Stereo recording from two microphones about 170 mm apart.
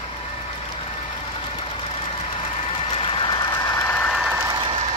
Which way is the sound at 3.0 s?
30° left (ahead or behind).